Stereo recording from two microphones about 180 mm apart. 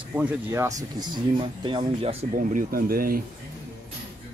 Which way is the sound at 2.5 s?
55° right (ahead or behind).